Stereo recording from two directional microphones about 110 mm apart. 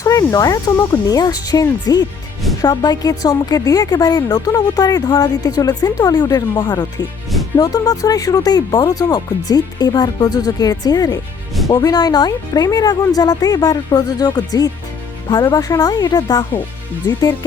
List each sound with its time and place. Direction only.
0.0 s speech: 30° left (ahead or behind)